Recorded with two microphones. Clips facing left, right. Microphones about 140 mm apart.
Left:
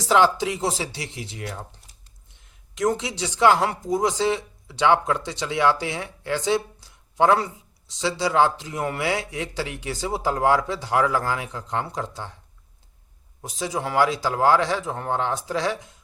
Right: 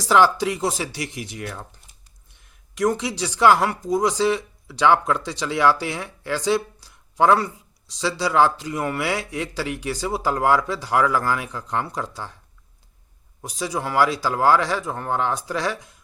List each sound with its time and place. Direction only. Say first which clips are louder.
0.1 s speech: right 1 dB; 20° left (ahead or behind)
13.4 s speech: right 1 dB; 20° left (ahead or behind)